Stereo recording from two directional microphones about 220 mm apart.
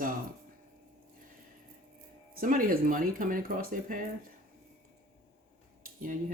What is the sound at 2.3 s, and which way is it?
Speech, 40° right (ahead or behind).